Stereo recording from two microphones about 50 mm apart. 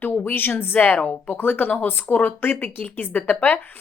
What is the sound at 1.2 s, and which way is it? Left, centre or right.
Speech, left.